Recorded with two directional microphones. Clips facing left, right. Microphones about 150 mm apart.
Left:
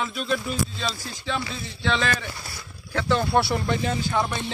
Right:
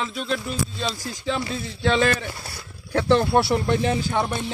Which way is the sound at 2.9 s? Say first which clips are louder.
Right 4 dB; 20° right (ahead or behind).